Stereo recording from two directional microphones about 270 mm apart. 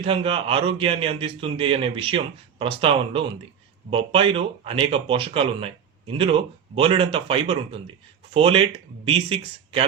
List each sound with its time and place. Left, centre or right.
0.0 s a man's voice: centre